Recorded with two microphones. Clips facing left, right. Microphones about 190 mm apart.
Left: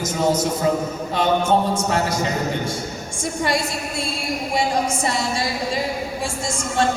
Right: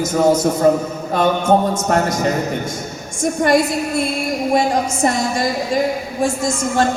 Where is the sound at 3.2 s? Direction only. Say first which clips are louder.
Right 8 dB; 50° right (ahead or behind).